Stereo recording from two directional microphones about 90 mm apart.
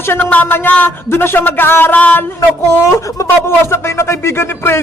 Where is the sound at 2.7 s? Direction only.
35° left (ahead or behind).